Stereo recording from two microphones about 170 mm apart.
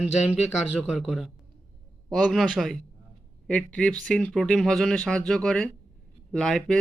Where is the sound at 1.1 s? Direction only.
Centre (ahead or behind).